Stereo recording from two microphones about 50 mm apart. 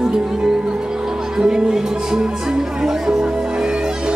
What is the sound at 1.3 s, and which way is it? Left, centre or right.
Speech, centre.